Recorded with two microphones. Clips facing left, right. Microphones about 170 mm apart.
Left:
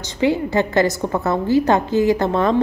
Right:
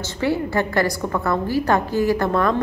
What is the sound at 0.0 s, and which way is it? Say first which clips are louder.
A woman's voice: left 3 dB; 15° left (ahead or behind).